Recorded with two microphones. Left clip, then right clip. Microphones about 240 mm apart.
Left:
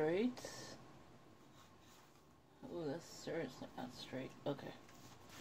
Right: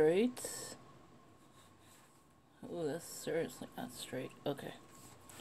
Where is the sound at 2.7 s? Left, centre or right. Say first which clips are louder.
Right 5 dB; right.